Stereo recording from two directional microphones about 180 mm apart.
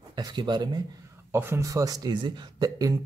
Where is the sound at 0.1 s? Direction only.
25° right (ahead or behind).